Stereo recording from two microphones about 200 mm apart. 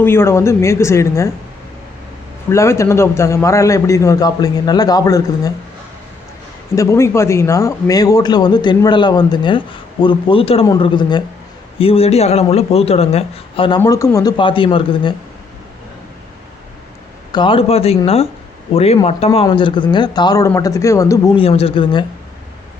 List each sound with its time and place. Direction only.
0.0 s a man's voice: 10° left (ahead or behind)
2.5 s a man's voice: 15° left (ahead or behind)
6.7 s speech: 15° left (ahead or behind); by 13.7 s 30° left (ahead or behind)
13.7 s speech: 15° left (ahead or behind)
17.3 s a man's voice: 25° left (ahead or behind)